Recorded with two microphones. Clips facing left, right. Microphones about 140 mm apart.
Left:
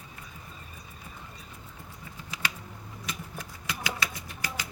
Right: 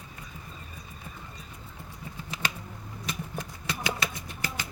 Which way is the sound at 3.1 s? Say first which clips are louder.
Right 4 dB; 30° right (ahead or behind).